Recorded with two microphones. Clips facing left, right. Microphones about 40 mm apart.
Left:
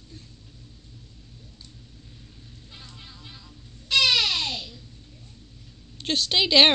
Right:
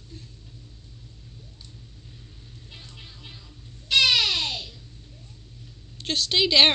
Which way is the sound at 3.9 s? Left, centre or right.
Right.